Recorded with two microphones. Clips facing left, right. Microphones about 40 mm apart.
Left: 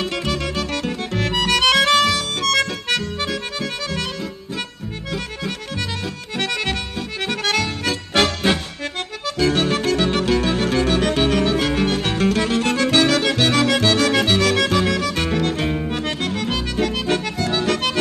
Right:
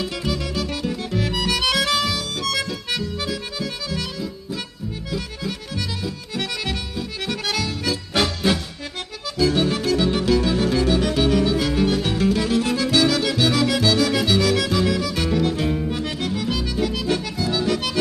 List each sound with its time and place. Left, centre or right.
0.0 s music: left
2.0 s harmonica: left
3.2 s accordion: left
6.3 s music: left
16.5 s accordion: left